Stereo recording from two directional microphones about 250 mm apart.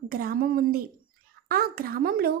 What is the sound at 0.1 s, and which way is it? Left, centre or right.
A woman's voice, right.